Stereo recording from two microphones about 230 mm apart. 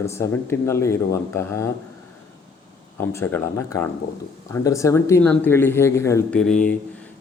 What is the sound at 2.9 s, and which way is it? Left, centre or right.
Speech, centre.